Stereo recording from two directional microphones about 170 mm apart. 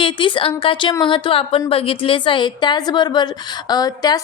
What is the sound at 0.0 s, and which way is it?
A woman's voice, 30° left (ahead or behind).